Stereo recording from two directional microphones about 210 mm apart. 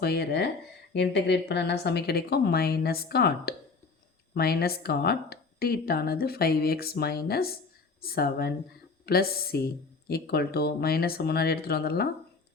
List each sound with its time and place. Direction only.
0.0 s speech: 50° left (ahead or behind)